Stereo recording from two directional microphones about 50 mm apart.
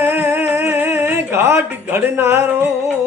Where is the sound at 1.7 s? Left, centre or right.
Right.